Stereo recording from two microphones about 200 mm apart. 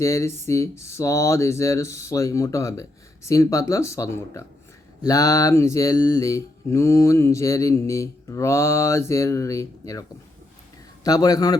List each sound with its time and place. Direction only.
0.0 s mantra: 15° left (ahead or behind)
11.0 s a man's voice: 20° left (ahead or behind)